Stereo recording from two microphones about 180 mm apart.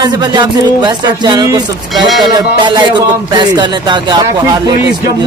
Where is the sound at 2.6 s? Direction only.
25° right (ahead or behind).